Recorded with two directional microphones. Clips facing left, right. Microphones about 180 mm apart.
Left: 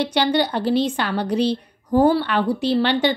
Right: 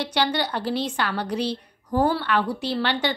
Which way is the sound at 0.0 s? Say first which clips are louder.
Left 5 dB; 20° left (ahead or behind).